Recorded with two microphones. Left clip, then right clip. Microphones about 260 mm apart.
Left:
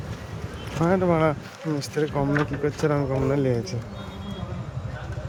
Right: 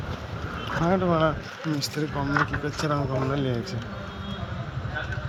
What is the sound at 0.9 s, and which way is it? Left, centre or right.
Speech, centre.